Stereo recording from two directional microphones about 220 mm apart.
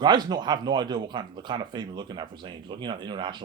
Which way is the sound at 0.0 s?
20° right (ahead or behind).